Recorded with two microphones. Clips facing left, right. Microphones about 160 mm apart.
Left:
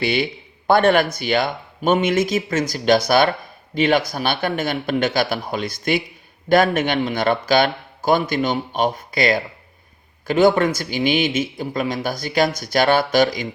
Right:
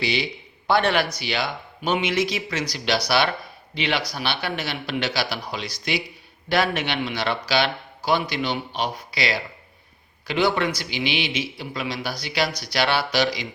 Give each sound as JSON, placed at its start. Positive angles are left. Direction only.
{"t": 0.0, "sound": "a man's voice", "side_deg": 55}